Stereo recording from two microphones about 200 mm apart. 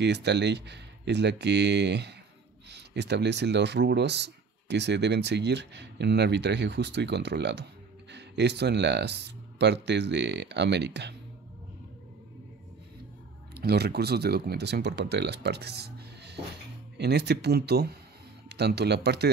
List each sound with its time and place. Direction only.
0.0 s speech: 55° right (ahead or behind)
13.6 s speech: 55° right (ahead or behind)